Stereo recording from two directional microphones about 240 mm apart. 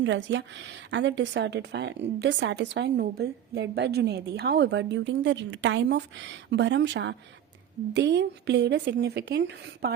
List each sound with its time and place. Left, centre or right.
0.0 s a woman's voice: right